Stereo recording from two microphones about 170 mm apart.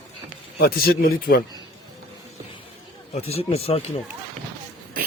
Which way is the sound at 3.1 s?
35° left (ahead or behind).